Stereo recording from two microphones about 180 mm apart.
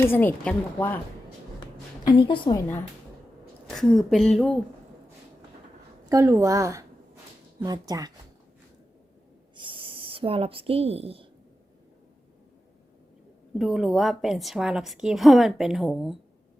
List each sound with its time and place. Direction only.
0.1 s a woman's voice: 10° left (ahead or behind)
2.0 s a woman's voice: 25° left (ahead or behind)
3.7 s a woman's voice: 5° left (ahead or behind)
6.1 s a woman's voice: 15° right (ahead or behind)
9.6 s a sound: 30° right (ahead or behind)
13.6 s a woman's voice: centre (ahead or behind)